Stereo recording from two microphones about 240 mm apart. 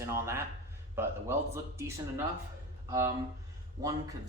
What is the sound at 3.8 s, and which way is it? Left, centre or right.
Speech, centre.